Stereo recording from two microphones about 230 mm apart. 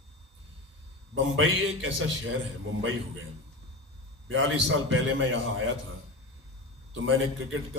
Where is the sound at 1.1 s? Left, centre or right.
Right.